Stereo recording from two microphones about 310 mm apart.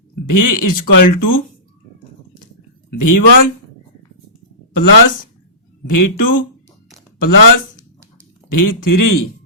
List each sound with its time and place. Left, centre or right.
0.3 s speech: left
2.9 s speech: left
4.7 s speech: left